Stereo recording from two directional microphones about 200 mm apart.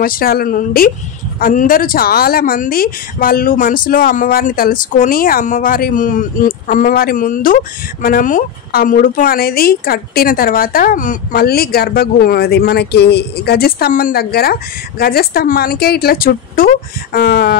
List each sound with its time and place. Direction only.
0.0 s a woman's voice: 45° left (ahead or behind)